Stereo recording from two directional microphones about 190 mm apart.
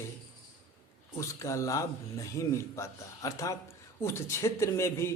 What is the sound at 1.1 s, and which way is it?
Speech, 15° left (ahead or behind).